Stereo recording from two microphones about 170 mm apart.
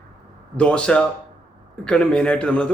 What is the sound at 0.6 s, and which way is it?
A man's voice, 5° left (ahead or behind).